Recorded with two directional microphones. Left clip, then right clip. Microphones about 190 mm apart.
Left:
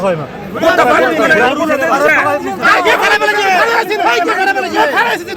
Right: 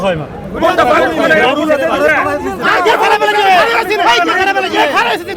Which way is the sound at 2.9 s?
60° right (ahead or behind).